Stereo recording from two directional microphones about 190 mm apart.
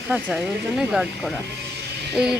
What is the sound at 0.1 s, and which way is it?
Speech, 10° right (ahead or behind).